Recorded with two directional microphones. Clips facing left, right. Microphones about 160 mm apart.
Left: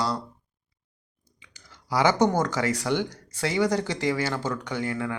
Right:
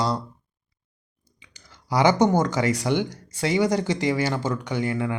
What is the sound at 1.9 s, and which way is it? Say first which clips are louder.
Speech: right 3 dB; 15° right (ahead or behind).